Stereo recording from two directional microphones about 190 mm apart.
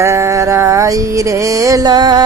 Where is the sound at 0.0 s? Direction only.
15° right (ahead or behind).